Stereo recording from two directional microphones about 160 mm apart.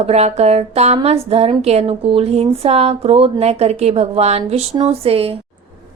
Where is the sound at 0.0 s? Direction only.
40° right (ahead or behind).